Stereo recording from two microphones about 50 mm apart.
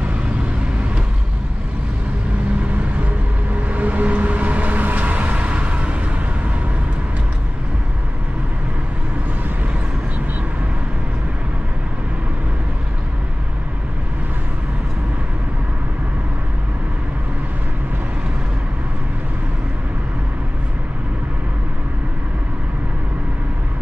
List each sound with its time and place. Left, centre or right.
3.5 s vehicle: right